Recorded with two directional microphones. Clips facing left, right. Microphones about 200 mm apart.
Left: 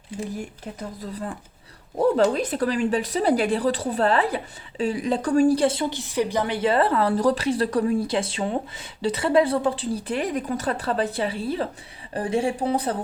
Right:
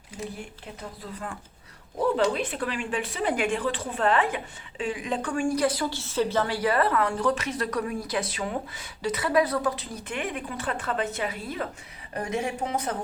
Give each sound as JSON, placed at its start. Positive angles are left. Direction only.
{"t": 2.1, "sound": "a woman's voice", "side_deg": 40}